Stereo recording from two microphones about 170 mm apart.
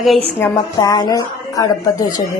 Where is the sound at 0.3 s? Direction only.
15° left (ahead or behind).